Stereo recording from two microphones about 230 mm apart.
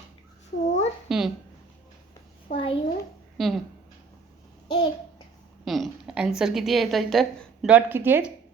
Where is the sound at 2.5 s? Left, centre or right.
Left.